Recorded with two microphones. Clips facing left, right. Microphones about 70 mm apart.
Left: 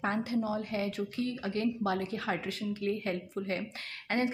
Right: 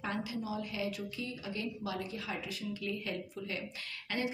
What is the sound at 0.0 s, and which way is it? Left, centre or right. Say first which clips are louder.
Speech: left 6 dB; left.